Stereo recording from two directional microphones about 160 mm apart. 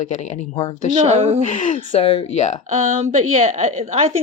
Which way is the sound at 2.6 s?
45° right (ahead or behind).